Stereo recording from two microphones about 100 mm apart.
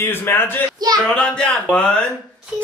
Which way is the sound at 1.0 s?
10° left (ahead or behind).